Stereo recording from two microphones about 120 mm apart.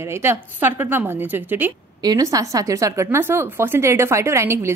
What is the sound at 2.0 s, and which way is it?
Speech, 30° right (ahead or behind).